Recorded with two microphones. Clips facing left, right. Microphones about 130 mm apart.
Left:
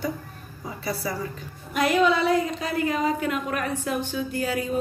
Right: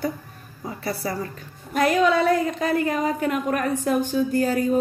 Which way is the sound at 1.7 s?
45° right (ahead or behind).